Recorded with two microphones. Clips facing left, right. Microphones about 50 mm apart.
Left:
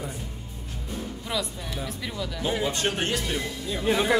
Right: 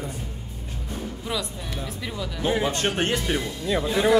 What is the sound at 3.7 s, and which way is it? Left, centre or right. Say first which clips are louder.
Speech: right 9 dB; right.